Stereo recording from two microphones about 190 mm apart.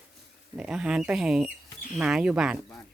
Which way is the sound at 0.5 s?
5° right (ahead or behind).